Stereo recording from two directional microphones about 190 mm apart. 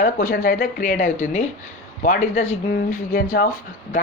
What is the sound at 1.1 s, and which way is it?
A woman's voice, 35° left (ahead or behind).